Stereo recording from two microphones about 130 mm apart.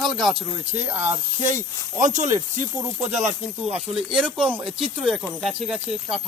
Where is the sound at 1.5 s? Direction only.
70° right (ahead or behind).